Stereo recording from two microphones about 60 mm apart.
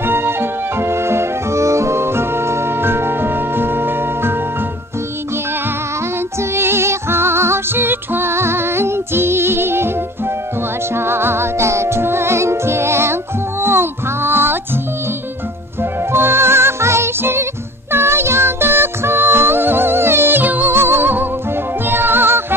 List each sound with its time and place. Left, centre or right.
0.0 s music: right
6.5 s music: right
15.8 s music: right